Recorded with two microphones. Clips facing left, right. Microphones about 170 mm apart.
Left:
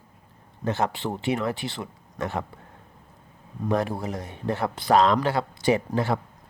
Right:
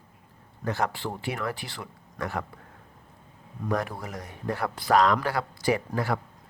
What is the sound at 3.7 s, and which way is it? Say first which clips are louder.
Speech: left 4 dB; 25° left (ahead or behind).